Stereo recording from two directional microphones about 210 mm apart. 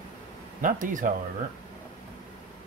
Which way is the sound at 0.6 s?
40° right (ahead or behind).